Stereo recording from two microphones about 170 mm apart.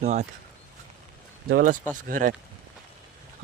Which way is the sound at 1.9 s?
50° right (ahead or behind).